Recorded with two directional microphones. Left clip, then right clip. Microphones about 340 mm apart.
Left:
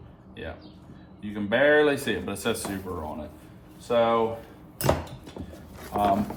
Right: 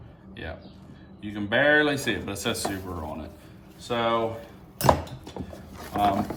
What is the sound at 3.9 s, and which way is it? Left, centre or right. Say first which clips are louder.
Speech: left 3 dB; centre.